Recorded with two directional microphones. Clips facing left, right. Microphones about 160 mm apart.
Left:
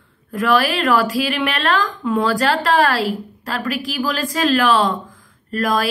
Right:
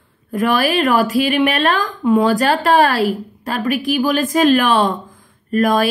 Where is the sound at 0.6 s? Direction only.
20° right (ahead or behind).